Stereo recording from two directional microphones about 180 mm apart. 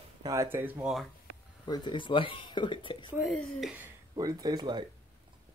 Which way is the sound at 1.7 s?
25° left (ahead or behind).